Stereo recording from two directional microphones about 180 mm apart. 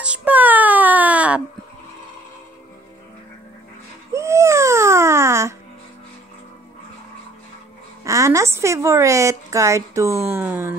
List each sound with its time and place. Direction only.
0.0 s baby cry: 5° right (ahead or behind)
4.1 s baby cry: 15° right (ahead or behind)
8.0 s a woman's voice: 15° right (ahead or behind)